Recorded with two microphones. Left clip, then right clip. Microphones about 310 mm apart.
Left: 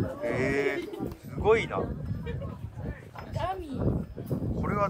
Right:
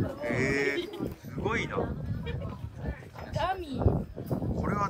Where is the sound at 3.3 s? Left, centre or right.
Right.